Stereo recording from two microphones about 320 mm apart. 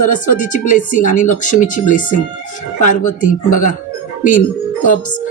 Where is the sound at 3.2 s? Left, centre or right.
Left.